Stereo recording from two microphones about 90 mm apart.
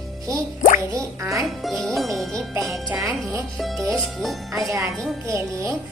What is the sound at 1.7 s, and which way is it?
Speech, centre (ahead or behind).